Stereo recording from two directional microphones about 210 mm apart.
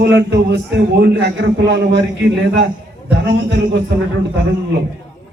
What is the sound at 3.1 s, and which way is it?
Speech, 55° right (ahead or behind).